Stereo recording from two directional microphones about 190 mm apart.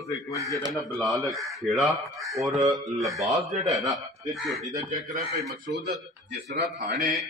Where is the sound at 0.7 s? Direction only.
Centre (ahead or behind).